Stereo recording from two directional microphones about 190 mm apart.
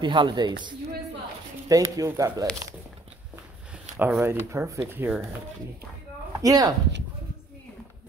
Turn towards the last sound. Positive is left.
turn(degrees=-20)  # may be behind; listen again after turning